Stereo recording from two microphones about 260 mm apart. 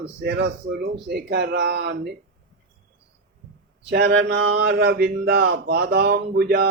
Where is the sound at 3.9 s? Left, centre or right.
Right.